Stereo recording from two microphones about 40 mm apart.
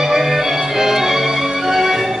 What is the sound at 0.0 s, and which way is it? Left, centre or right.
Music, centre.